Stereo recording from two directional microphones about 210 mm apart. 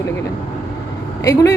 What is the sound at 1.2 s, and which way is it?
Speech, 15° left (ahead or behind).